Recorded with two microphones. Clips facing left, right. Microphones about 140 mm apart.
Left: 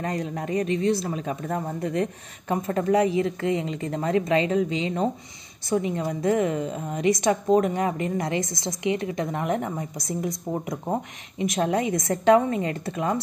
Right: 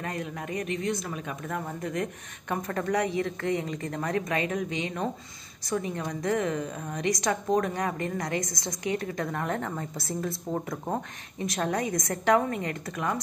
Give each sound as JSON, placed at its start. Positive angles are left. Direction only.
{"t": 0.0, "sound": "a woman's voice", "side_deg": 35}